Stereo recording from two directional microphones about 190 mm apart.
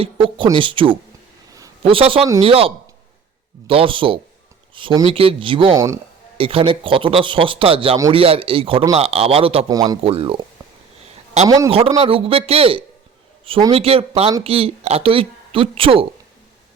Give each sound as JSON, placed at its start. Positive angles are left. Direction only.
{"t": 0.0, "sound": "a man's voice", "side_deg": -25}
{"t": 5.7, "sound": "speech", "side_deg": -15}
{"t": 6.3, "sound": "a man's voice", "side_deg": -30}
{"t": 10.0, "sound": "a man's voice", "side_deg": -30}
{"t": 11.9, "sound": "a man's voice", "side_deg": -30}